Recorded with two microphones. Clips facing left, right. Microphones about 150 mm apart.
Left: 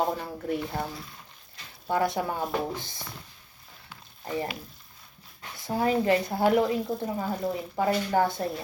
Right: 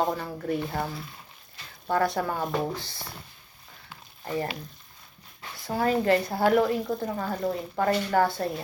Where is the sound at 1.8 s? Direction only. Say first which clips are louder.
Right 1 dB; 20° left (ahead or behind).